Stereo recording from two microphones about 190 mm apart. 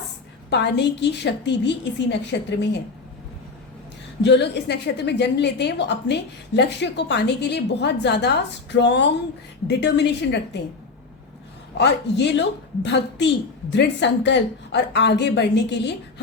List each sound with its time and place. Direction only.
0.5 s a woman's voice: 65° left (ahead or behind)
4.2 s a woman's voice: 65° left (ahead or behind)
11.8 s a woman's voice: 65° left (ahead or behind)